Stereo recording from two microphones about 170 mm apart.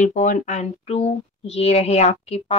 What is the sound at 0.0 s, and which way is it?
Speech, 50° left (ahead or behind).